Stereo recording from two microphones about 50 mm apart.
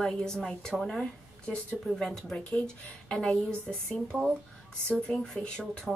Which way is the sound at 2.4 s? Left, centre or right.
Left.